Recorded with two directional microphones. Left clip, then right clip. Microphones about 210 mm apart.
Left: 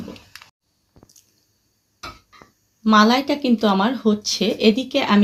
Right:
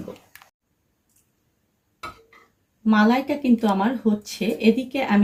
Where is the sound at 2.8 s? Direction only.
25° left (ahead or behind).